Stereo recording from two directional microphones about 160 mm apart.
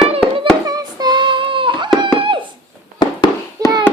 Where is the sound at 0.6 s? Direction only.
20° right (ahead or behind).